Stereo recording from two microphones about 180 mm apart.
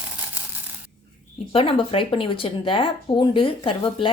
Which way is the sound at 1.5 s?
30° left (ahead or behind).